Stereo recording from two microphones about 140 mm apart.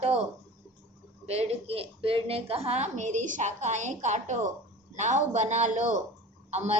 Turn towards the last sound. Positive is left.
turn(degrees=-50)  # may be behind; listen again after turning